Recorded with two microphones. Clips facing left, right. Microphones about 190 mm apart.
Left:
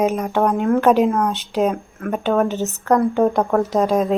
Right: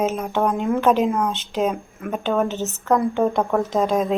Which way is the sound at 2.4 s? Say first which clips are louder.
Left 3 dB; 15° left (ahead or behind).